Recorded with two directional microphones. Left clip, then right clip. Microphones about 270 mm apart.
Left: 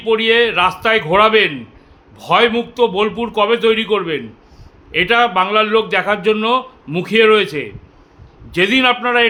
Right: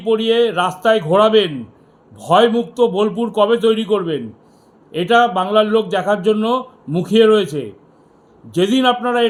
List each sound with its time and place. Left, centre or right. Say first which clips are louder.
0.0 s a man's voice: left 2 dB; left